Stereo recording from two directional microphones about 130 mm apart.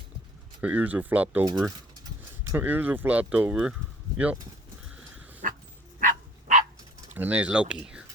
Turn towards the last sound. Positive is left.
turn(degrees=-10)  # may be behind; listen again after turning